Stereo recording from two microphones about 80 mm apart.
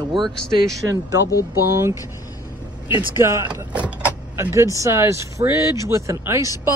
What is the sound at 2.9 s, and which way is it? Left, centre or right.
Speech, right.